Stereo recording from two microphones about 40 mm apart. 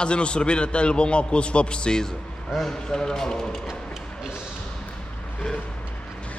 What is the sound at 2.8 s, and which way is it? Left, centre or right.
Speech, centre.